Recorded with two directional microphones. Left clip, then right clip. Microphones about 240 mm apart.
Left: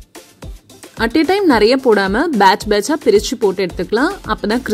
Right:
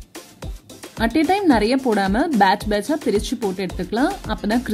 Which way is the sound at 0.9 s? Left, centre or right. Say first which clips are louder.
Left 4 dB; left.